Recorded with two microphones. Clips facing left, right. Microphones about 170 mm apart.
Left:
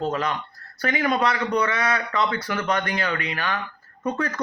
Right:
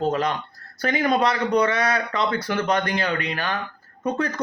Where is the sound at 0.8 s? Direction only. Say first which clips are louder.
Right 2 dB; 40° right (ahead or behind).